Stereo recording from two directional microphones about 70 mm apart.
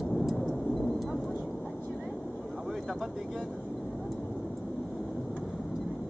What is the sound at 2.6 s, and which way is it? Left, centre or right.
Vehicle, centre.